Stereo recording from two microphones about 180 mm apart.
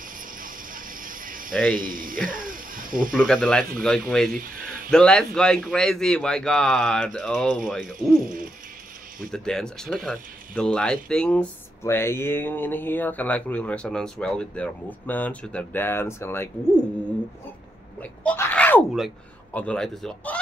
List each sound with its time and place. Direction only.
0.4 s a sound: 50° right (ahead or behind)
1.5 s speech: 5° left (ahead or behind)
1.8 s speech: 50° right (ahead or behind)
2.2 s a sound: 50° right (ahead or behind)
3.2 s a man's voice: centre (ahead or behind)
9.3 s speech: 5° left (ahead or behind)
18.0 s a man's voice: 10° left (ahead or behind)